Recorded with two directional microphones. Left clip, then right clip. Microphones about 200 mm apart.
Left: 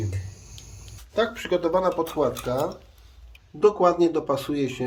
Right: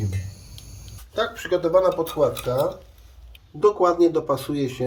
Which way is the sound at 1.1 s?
25° left (ahead or behind).